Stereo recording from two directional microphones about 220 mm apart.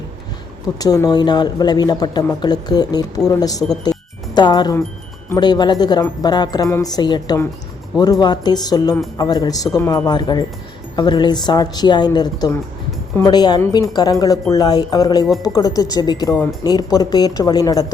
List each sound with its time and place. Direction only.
0.8 s speech: 15° left (ahead or behind)